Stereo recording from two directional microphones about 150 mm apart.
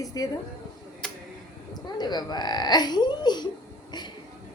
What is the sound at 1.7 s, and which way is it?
A woman's voice, 30° left (ahead or behind).